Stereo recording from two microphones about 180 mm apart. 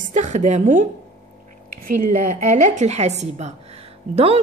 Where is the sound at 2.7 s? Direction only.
40° right (ahead or behind).